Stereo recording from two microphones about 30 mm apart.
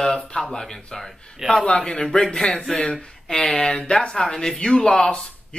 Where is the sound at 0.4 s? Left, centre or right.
Centre.